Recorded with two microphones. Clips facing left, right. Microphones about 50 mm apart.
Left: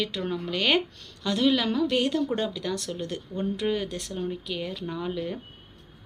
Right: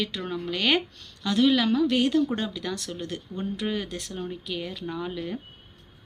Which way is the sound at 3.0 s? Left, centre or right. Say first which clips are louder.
Left 2 dB; right.